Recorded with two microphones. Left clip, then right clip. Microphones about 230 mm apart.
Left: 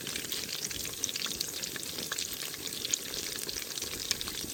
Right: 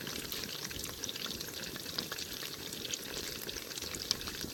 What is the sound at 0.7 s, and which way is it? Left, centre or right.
Frying, centre.